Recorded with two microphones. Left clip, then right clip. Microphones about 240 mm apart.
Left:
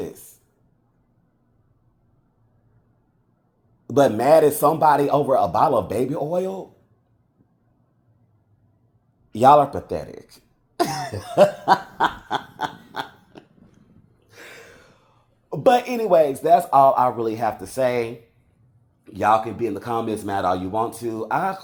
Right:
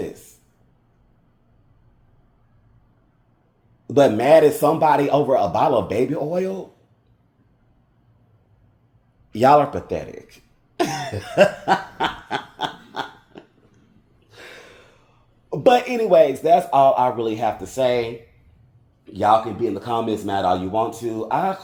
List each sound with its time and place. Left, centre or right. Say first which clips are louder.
3.8 s speech: right 1 dB; centre
9.3 s speech: left 1 dB; centre
11.0 s cough: even; centre
11.9 s a sound: left 2 dB; centre; by 14.7 s left
15.4 s speech: right 1 dB; centre